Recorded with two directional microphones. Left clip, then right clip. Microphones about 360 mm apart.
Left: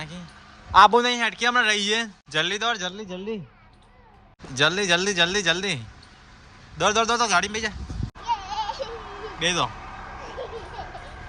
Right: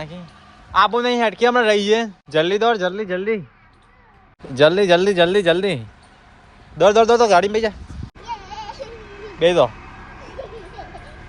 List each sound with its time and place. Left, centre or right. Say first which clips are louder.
0.7 s a man's voice: left 1 dB; centre
4.5 s a man's voice: right 7 dB; centre
8.2 s a sound: left 4 dB; centre
9.4 s a man's voice: right 9 dB; centre
9.7 s vehicle: left 1 dB; centre